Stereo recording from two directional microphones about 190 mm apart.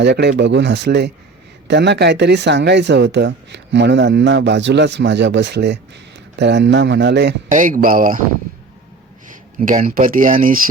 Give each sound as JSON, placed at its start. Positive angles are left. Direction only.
{"t": 0.0, "sound": "speech", "side_deg": -65}
{"t": 7.5, "sound": "speech", "side_deg": -45}
{"t": 9.6, "sound": "speech", "side_deg": -45}